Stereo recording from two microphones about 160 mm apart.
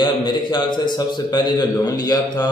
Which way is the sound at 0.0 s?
30° left (ahead or behind).